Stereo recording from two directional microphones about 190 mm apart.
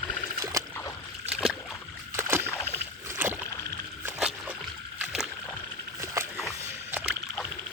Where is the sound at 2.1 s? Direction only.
15° right (ahead or behind).